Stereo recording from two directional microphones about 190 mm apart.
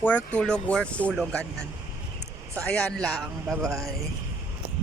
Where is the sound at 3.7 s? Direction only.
15° right (ahead or behind).